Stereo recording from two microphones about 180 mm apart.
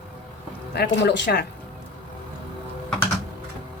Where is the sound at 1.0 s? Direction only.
70° left (ahead or behind).